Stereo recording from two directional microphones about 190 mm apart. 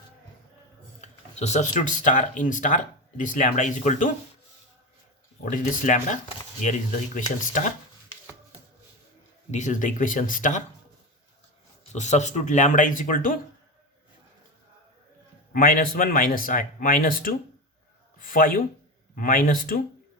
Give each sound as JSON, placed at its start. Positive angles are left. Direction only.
{"t": 1.0, "sound": "speech", "side_deg": 35}
{"t": 5.4, "sound": "speech", "side_deg": 45}
{"t": 9.5, "sound": "speech", "side_deg": 40}
{"t": 11.9, "sound": "speech", "side_deg": 40}
{"t": 15.5, "sound": "speech", "side_deg": 50}